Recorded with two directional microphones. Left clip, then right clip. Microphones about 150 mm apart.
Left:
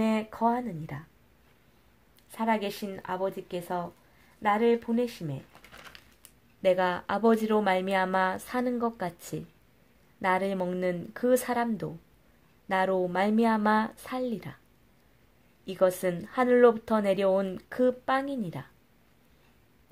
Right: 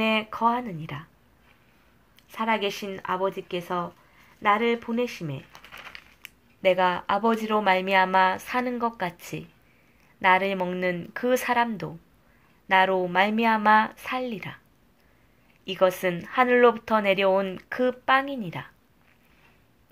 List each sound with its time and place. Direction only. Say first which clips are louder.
0.0 s speech: right 4 dB; 30° left (ahead or behind)
2.3 s speech: right 3 dB; 35° left (ahead or behind)
5.9 s a sound: right 7 dB; 45° left (ahead or behind)
6.6 s speech: right 4 dB; 40° left (ahead or behind)
15.6 s speech: right 3 dB; 40° left (ahead or behind)